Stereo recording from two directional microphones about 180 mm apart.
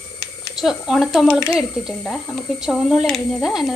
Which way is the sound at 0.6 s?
Centre (ahead or behind).